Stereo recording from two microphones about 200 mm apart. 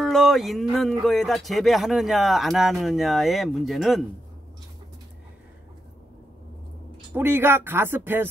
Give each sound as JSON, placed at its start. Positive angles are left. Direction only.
{"t": 0.0, "sound": "speech", "side_deg": 0}
{"t": 7.2, "sound": "speech", "side_deg": -10}